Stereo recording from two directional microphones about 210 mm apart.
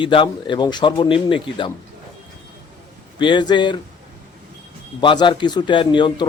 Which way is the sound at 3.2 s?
20° left (ahead or behind).